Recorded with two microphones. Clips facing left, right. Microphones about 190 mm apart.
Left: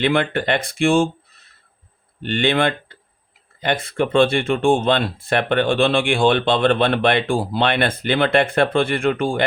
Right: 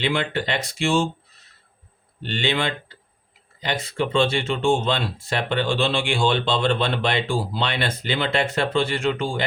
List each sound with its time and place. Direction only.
0.0 s speech: 55° left (ahead or behind)
2.2 s speech: 55° left (ahead or behind)